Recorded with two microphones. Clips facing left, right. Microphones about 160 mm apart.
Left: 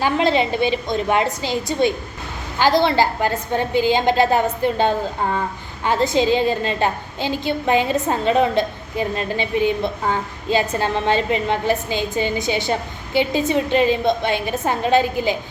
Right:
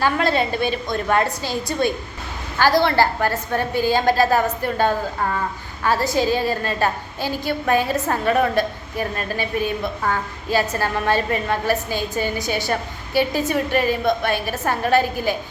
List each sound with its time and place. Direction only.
0.0 s a woman's voice: 20° left (ahead or behind)